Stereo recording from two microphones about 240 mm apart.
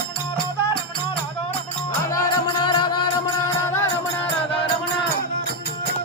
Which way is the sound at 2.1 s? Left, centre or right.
Centre.